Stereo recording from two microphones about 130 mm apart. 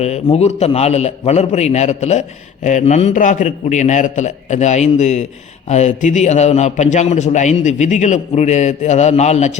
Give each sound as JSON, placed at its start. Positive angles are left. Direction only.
{"t": 0.0, "sound": "a man's voice", "side_deg": 55}